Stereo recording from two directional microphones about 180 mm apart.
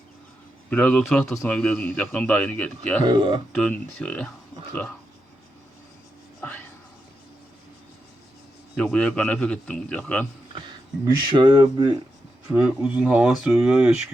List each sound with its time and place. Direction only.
0.7 s a man's voice: 5° left (ahead or behind)
3.0 s speech: 25° right (ahead or behind)
3.5 s speech: 5° left (ahead or behind)
8.7 s a man's voice: 5° left (ahead or behind)
11.0 s speech: 25° right (ahead or behind)
12.5 s speech: 5° right (ahead or behind)